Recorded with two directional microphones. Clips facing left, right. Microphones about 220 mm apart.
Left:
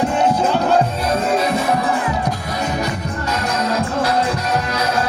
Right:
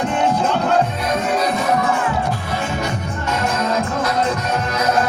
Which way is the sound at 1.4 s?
35° left (ahead or behind).